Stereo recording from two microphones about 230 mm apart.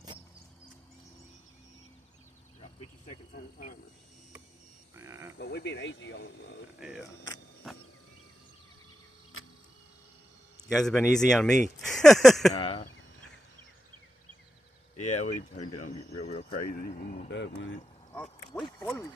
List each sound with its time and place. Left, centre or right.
3.1 s speech: left
4.9 s speech: centre
5.4 s speech: left
6.7 s speech: centre
9.4 s a sound: left
10.7 s speech: centre
12.5 s speech: left
15.0 s speech: left
16.5 s speech: left
17.2 s speech: left
18.5 s speech: centre